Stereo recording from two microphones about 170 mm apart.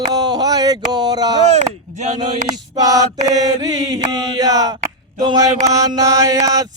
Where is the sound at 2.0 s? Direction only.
45° right (ahead or behind).